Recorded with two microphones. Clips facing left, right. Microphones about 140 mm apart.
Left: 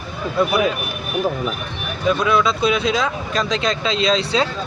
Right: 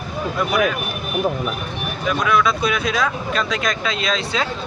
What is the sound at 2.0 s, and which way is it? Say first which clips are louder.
Speech: left 2 dB; 25° left (ahead or behind).